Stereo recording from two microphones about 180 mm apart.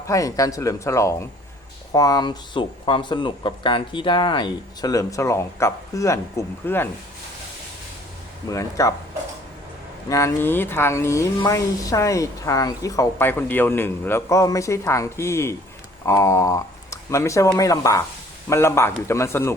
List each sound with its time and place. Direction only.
0.1 s speech: 20° left (ahead or behind)
8.4 s speech: 15° left (ahead or behind)
10.1 s speech: 15° left (ahead or behind)